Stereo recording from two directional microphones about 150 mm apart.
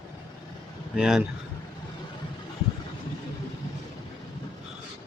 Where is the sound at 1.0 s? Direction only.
5° right (ahead or behind).